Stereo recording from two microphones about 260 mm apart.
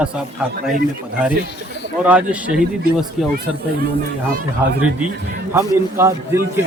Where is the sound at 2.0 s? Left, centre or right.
Centre.